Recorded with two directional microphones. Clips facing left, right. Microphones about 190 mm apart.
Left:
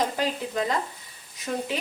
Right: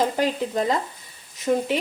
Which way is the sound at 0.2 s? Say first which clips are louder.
Right 4 dB; 30° right (ahead or behind).